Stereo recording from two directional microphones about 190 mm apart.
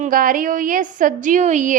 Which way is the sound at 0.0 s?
45° right (ahead or behind).